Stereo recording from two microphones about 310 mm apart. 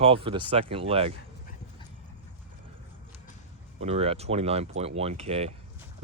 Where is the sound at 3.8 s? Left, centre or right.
Centre.